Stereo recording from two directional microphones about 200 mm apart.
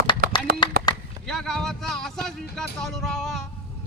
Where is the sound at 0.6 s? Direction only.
20° left (ahead or behind).